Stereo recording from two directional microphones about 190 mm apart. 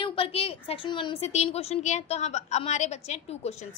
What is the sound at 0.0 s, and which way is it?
A woman's voice, 30° left (ahead or behind).